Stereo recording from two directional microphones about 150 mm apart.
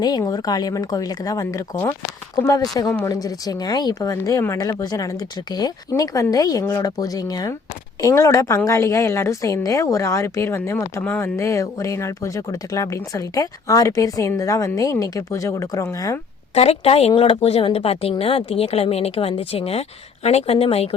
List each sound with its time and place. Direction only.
0.0 s a woman's voice: 25° left (ahead or behind)
16.6 s speech: 40° left (ahead or behind)